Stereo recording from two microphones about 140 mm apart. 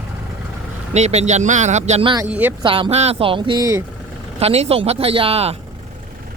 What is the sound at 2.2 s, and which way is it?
Speech, 10° right (ahead or behind).